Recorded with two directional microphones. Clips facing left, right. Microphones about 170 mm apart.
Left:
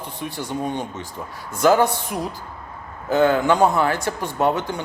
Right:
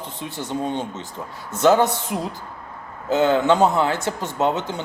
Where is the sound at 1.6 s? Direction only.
20° right (ahead or behind).